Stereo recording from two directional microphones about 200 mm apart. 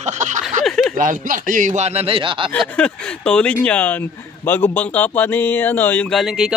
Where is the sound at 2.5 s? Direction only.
5° left (ahead or behind).